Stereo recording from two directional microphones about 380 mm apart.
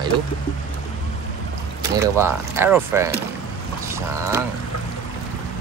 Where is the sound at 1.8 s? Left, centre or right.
Centre.